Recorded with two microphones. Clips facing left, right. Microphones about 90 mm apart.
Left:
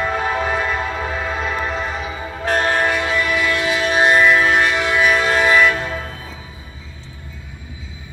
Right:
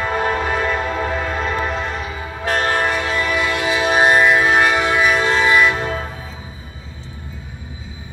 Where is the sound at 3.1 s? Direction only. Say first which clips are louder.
Left 1 dB; 30° right (ahead or behind).